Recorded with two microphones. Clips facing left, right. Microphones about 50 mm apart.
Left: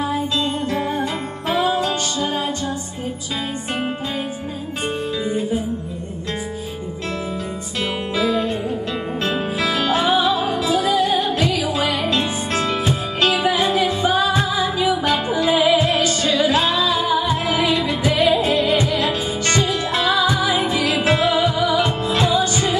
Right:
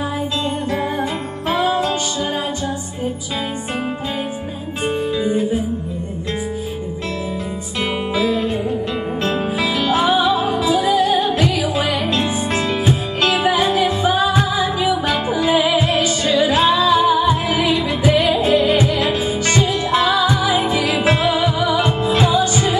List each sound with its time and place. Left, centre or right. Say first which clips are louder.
1.5 s music: right 1 dB; centre
4.8 s music: right 5 dB; centre
8.1 s music: even; centre
18.9 s music: right 2 dB; centre
19.5 s music: right 3 dB; centre